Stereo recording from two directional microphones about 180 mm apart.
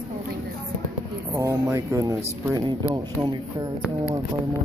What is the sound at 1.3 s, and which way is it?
Speech, 15° right (ahead or behind).